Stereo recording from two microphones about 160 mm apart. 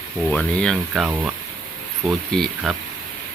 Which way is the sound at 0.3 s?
5° left (ahead or behind).